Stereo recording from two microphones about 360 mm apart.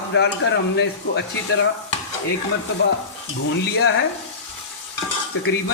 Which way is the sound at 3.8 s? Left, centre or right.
Left.